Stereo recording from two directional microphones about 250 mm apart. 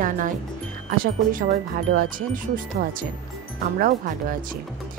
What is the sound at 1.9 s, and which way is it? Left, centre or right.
A woman's voice, right.